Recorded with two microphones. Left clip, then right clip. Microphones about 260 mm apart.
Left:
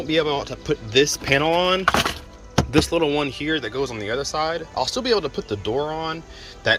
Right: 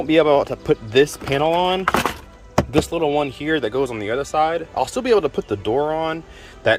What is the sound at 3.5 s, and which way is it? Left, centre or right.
Speech, centre.